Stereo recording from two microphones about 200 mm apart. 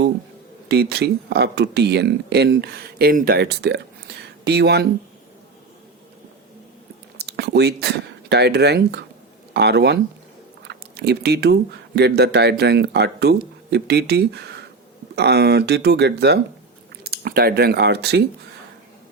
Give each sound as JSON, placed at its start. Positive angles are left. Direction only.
{"t": 0.7, "sound": "speech", "side_deg": -55}
{"t": 7.2, "sound": "speech", "side_deg": -55}